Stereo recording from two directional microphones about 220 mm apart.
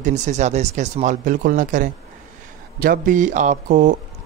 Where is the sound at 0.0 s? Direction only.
30° right (ahead or behind).